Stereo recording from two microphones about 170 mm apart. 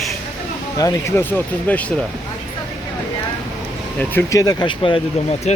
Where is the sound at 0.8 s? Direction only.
20° left (ahead or behind).